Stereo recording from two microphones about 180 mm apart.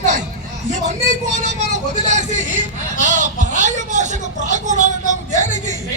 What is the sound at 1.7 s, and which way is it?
Speech, 40° right (ahead or behind).